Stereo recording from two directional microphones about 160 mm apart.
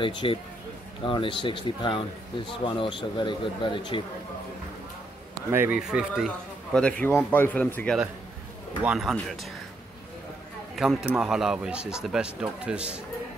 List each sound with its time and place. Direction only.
0.0 s speech: 30° left (ahead or behind)
5.5 s speech: 10° right (ahead or behind)
10.8 s speech: 5° right (ahead or behind)